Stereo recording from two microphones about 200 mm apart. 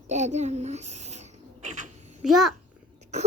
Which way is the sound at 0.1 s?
35° right (ahead or behind).